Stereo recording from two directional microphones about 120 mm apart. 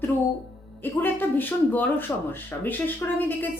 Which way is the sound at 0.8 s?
15° left (ahead or behind).